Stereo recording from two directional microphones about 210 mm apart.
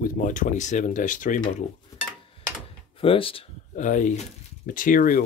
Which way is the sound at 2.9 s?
25° left (ahead or behind).